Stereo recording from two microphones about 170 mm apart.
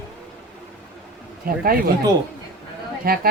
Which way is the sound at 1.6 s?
60° right (ahead or behind).